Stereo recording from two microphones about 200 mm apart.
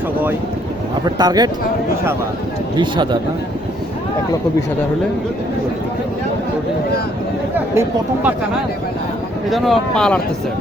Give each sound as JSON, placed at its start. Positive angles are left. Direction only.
{"t": 1.2, "sound": "speech", "side_deg": -20}
{"t": 2.7, "sound": "speech", "side_deg": -25}
{"t": 7.8, "sound": "speech", "side_deg": -10}
{"t": 9.5, "sound": "speech", "side_deg": 0}